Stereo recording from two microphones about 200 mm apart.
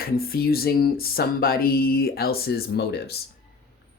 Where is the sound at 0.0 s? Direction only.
50° left (ahead or behind).